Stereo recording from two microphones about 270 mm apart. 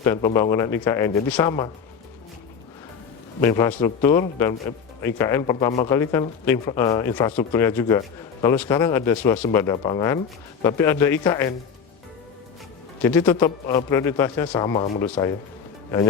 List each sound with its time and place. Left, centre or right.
0.0 s speech: centre
3.4 s speech: centre
13.0 s speech: centre
14.6 s speech: centre